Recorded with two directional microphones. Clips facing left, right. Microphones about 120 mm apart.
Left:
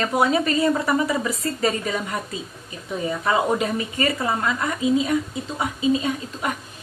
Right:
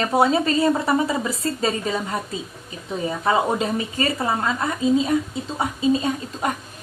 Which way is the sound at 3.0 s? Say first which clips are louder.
Right 1 dB; 30° right (ahead or behind).